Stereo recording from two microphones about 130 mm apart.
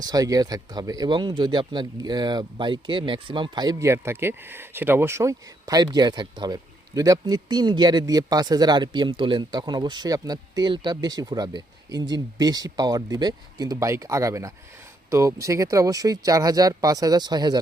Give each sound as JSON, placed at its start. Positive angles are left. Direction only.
{"t": 0.0, "sound": "speech", "side_deg": -30}